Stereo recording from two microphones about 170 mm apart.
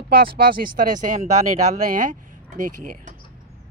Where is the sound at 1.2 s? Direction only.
45° right (ahead or behind).